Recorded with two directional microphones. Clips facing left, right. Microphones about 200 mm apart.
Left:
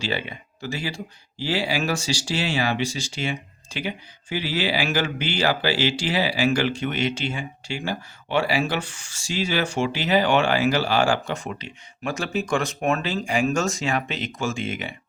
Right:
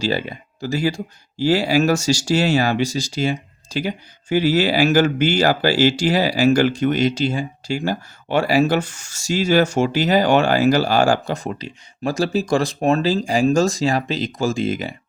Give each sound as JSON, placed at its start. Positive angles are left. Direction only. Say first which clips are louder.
{"t": 0.0, "sound": "speech", "louder": "right 6 dB", "side_deg": -40}